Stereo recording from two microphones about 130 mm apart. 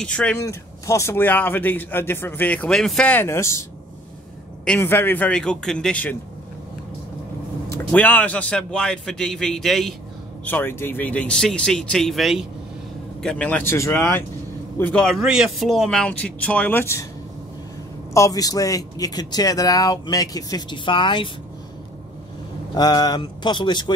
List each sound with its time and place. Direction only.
0.0 s speech: 5° left (ahead or behind)
0.4 s speech: 25° left (ahead or behind)
4.6 s speech: 15° left (ahead or behind)
7.9 s speech: 10° left (ahead or behind)
10.4 s speech: 15° left (ahead or behind)
14.8 s speech: 10° left (ahead or behind)
18.1 s a man's voice: 25° left (ahead or behind)
22.8 s speech: 30° left (ahead or behind)